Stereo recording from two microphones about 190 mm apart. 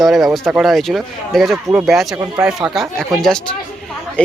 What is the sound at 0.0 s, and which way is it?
Speech, centre (ahead or behind).